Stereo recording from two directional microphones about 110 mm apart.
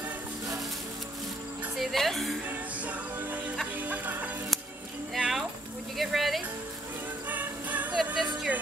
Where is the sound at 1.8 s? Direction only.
Centre (ahead or behind).